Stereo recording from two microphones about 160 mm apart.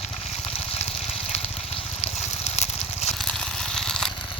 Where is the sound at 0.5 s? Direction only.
40° left (ahead or behind).